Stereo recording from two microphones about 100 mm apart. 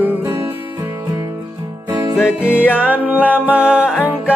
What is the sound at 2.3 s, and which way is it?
Music, 15° right (ahead or behind).